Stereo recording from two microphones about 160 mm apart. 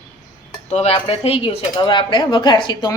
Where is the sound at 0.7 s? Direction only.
40° left (ahead or behind).